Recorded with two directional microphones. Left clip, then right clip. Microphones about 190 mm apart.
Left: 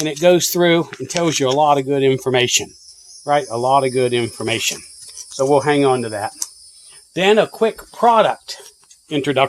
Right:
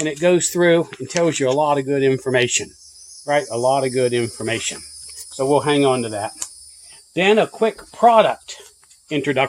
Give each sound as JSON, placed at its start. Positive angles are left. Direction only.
{"t": 0.0, "sound": "speech", "side_deg": 35}